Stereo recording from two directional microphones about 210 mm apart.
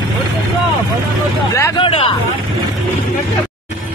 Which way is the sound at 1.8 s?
25° left (ahead or behind).